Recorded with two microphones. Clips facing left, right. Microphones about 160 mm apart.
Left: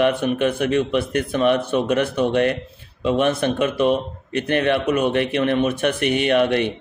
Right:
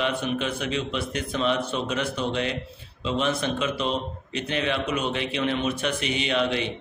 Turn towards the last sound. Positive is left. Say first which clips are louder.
# left 7 dB
turn(degrees=55)  # may be behind; listen again after turning